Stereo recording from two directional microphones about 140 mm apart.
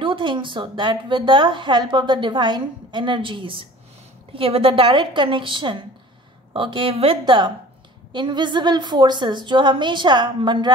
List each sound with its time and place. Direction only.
0.0 s a woman's voice: 35° right (ahead or behind)